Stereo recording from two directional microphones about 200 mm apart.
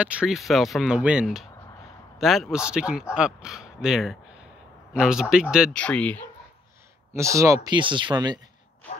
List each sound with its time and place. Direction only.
0.0 s speech: 5° right (ahead or behind)
7.2 s speech: 15° right (ahead or behind)